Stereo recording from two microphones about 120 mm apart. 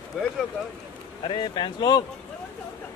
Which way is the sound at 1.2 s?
45° left (ahead or behind).